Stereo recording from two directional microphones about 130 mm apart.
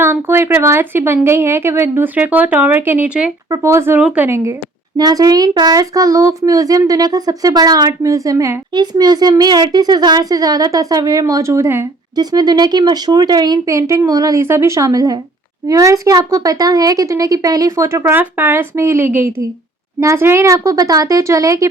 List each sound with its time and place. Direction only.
0.0 s a woman's voice: 20° right (ahead or behind)
3.5 s a woman's voice: 20° right (ahead or behind)
4.9 s speech: 30° right (ahead or behind)
8.7 s speech: 35° right (ahead or behind)
12.1 s speech: 30° right (ahead or behind)